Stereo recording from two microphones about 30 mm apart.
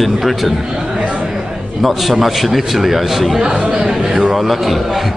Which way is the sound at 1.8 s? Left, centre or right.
Centre.